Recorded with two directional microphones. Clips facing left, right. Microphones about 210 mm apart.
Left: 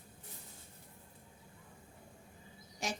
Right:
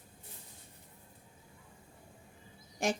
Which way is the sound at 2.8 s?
55° right (ahead or behind).